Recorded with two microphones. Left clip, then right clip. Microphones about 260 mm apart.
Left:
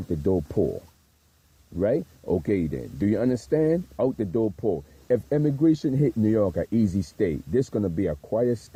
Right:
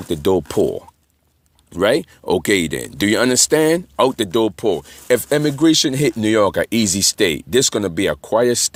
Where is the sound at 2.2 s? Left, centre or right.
Right.